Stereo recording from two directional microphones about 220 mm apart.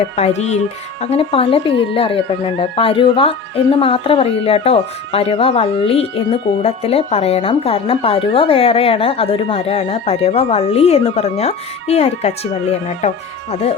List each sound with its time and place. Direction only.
0.2 s speech: 30° left (ahead or behind)
13.5 s speech: 25° left (ahead or behind)